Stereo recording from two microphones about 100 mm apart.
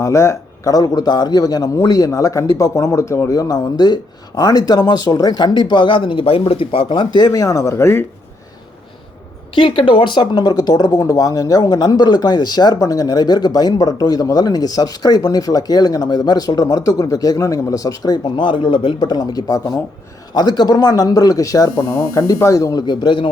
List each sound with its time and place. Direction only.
0.0 s speech: 30° left (ahead or behind)
9.6 s speech: 60° left (ahead or behind)
19.0 s speech: 40° left (ahead or behind)
23.0 s speech: 50° left (ahead or behind)